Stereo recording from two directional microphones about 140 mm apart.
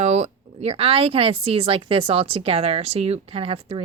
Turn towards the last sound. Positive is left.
turn(degrees=-45)  # may be behind; listen again after turning